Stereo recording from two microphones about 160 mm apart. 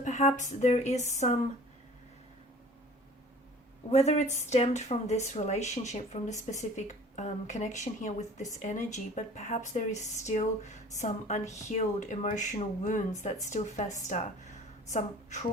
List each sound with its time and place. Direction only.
0.0 s speech: 50° left (ahead or behind)
3.9 s speech: 45° left (ahead or behind)